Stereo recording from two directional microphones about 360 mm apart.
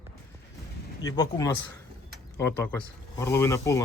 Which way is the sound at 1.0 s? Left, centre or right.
Centre.